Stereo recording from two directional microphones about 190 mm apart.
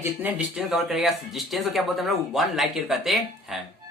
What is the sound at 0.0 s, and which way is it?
A child's voice, 10° right (ahead or behind).